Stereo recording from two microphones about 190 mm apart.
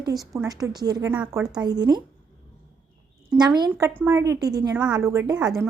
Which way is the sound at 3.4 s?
20° right (ahead or behind).